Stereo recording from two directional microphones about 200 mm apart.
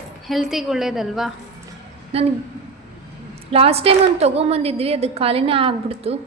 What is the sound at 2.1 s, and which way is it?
Speech, 30° right (ahead or behind).